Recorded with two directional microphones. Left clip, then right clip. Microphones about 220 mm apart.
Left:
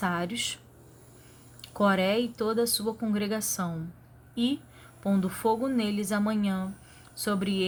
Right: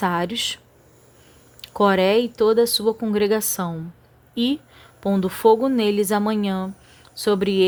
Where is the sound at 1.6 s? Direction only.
35° right (ahead or behind).